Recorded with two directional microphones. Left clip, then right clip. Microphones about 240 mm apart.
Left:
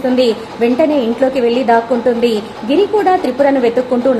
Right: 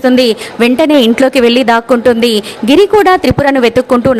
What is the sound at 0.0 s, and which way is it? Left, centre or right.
A woman's voice, right.